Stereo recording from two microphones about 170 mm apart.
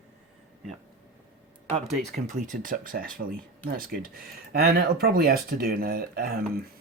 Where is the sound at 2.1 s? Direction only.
45° right (ahead or behind).